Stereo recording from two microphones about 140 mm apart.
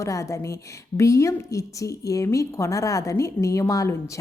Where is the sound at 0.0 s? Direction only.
20° left (ahead or behind).